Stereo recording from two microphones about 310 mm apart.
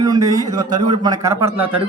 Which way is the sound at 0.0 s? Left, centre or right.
Centre.